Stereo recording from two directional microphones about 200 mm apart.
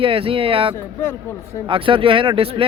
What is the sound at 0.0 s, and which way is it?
Speech, 25° right (ahead or behind).